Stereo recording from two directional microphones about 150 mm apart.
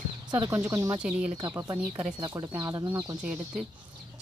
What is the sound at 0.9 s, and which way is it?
Speech, 5° right (ahead or behind).